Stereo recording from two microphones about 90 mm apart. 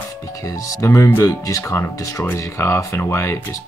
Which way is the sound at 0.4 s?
35° left (ahead or behind).